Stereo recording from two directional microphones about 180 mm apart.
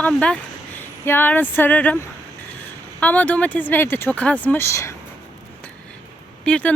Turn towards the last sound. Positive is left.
turn(degrees=5)  # may be behind; listen again after turning